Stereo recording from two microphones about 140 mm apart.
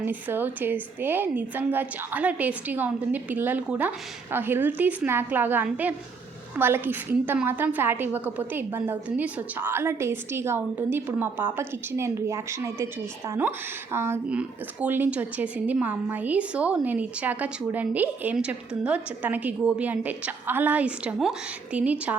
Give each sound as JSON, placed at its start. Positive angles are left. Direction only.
{"t": 0.0, "sound": "a woman's voice", "side_deg": -15}